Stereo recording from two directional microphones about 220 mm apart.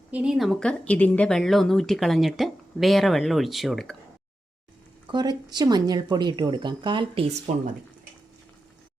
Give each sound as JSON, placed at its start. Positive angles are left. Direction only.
{"t": 0.1, "sound": "speech", "side_deg": -5}
{"t": 5.1, "sound": "speech", "side_deg": -20}